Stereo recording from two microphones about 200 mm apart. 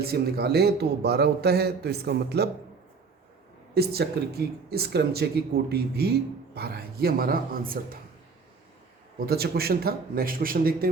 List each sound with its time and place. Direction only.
0.0 s speech: 50° right (ahead or behind)
3.8 s speech: 50° right (ahead or behind)
9.1 s speech: 50° right (ahead or behind)